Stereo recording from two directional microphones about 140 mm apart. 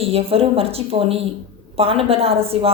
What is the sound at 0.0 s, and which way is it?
A woman's voice, 45° right (ahead or behind).